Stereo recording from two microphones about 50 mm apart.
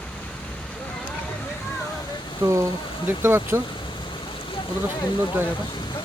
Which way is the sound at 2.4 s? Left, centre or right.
Right.